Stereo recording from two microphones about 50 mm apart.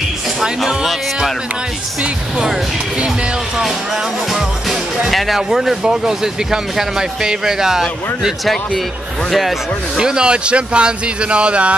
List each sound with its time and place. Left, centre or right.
0.4 s speech: centre
4.3 s speech: centre
9.3 s speech: centre
9.9 s speech: centre